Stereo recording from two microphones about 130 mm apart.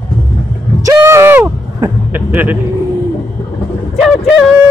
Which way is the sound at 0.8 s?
20° right (ahead or behind).